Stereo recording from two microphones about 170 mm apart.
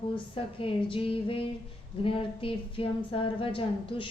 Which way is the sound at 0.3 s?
30° left (ahead or behind).